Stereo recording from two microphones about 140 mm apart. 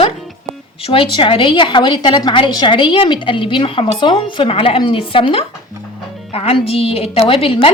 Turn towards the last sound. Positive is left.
turn(degrees=40)  # may be behind; listen again after turning